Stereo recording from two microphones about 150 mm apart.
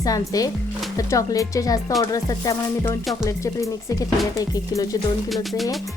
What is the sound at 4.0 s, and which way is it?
Speech, 25° left (ahead or behind).